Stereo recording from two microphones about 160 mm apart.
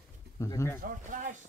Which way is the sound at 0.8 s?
55° right (ahead or behind).